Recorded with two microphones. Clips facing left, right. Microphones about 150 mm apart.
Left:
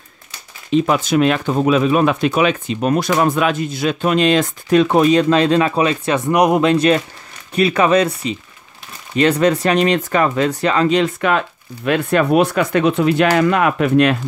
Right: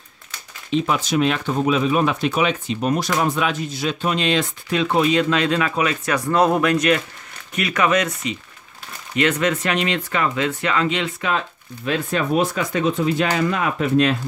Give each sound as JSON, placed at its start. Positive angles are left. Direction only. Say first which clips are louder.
{"t": 0.8, "sound": "speech", "louder": "left 4 dB", "side_deg": 55}
{"t": 11.1, "sound": "speech", "louder": "left 6 dB", "side_deg": 60}